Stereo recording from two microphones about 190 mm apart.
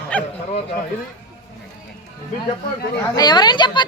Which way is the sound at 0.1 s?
5° left (ahead or behind).